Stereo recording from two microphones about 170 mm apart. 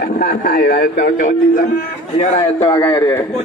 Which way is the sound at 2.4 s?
30° left (ahead or behind).